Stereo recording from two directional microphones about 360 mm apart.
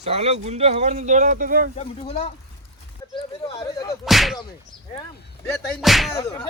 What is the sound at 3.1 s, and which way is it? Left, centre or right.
Whip, centre.